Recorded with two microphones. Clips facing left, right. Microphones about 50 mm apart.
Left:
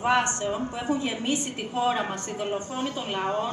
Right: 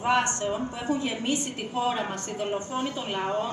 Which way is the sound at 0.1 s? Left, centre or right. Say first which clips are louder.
Right 1 dB; left.